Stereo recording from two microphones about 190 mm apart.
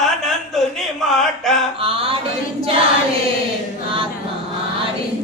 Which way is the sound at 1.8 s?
30° right (ahead or behind).